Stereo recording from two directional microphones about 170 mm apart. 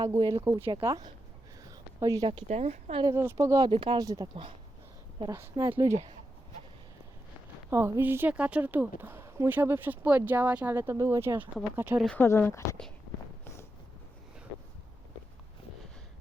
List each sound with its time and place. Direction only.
0.0 s speech: 25° right (ahead or behind)
1.7 s a sound: 20° right (ahead or behind)
2.5 s speech: 40° right (ahead or behind)
3.0 s speech: 15° right (ahead or behind)
7.7 s speech: 15° right (ahead or behind)
12.0 s speech: 10° left (ahead or behind)
13.4 s a sound: 15° left (ahead or behind)